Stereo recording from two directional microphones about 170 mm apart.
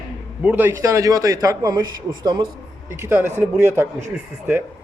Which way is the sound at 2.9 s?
15° right (ahead or behind).